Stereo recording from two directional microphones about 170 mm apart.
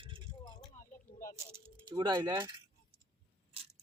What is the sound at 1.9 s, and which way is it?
Speech, 25° right (ahead or behind).